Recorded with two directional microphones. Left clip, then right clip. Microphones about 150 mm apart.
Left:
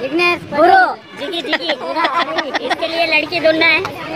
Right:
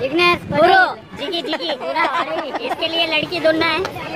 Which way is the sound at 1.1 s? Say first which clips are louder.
Left 1 dB; 50° right (ahead or behind).